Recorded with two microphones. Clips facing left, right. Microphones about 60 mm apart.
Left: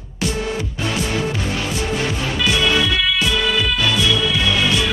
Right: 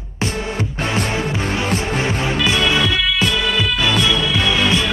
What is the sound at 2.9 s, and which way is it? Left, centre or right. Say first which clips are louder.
Music: right 1 dB; centre.